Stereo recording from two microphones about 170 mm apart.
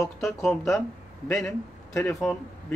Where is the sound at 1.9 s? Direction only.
15° left (ahead or behind).